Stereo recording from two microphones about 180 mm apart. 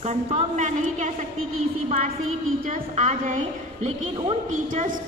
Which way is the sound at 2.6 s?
45° right (ahead or behind).